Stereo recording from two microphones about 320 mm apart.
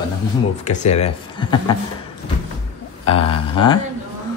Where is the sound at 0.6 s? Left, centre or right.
Left.